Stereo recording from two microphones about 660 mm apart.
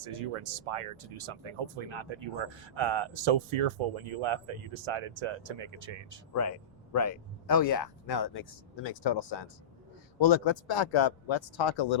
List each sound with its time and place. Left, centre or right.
0.0 s speech: right
6.9 s speech: left